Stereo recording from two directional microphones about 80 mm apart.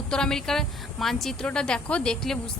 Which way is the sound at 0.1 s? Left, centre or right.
Centre.